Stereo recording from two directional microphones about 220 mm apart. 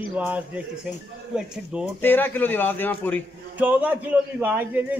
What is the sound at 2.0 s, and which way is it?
A man's voice, 10° left (ahead or behind).